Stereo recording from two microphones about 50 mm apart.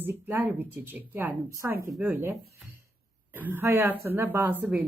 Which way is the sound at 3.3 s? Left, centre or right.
Right.